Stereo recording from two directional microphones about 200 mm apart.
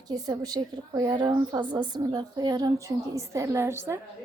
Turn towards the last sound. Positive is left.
turn(degrees=-15)  # may be behind; listen again after turning